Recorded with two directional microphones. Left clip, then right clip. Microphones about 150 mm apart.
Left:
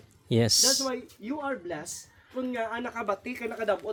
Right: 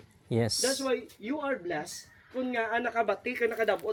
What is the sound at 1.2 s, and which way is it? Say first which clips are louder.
Speech: right 1 dB; 30° left (ahead or behind).